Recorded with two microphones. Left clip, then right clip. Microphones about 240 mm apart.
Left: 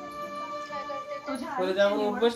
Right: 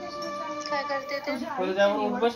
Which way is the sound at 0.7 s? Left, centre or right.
Right.